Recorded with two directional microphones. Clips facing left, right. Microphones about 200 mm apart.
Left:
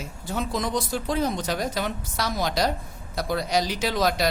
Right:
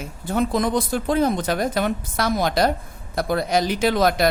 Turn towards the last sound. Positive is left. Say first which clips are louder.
# right 5 dB
turn(degrees=-55)  # may be behind; listen again after turning